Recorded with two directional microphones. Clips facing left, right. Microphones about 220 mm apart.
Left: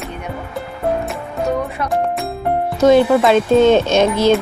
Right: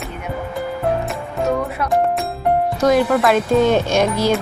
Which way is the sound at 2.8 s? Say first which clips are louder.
Left 5 dB; 25° left (ahead or behind).